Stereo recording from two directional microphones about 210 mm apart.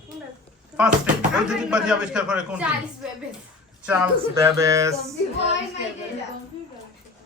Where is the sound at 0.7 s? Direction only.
5° right (ahead or behind).